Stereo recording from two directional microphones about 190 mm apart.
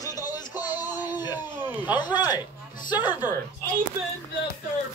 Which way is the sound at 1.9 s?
20° left (ahead or behind).